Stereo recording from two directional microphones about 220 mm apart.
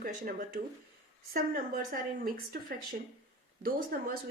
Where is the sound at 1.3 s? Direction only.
40° right (ahead or behind).